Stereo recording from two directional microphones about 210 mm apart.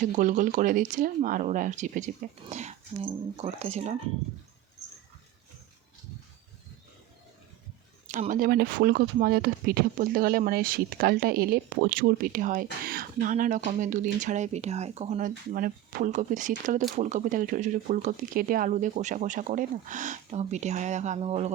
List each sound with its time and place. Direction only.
0.0 s speech: 35° right (ahead or behind)
8.0 s speech: 35° right (ahead or behind)